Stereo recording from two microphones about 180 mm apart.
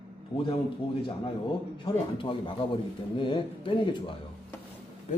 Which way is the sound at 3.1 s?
25° left (ahead or behind).